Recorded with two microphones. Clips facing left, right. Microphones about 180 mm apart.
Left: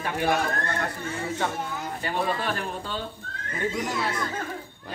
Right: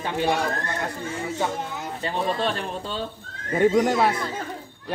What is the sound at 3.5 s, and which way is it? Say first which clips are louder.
Speech: right 10 dB; 65° right (ahead or behind).